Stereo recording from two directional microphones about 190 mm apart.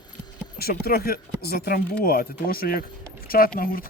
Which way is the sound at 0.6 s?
55° left (ahead or behind).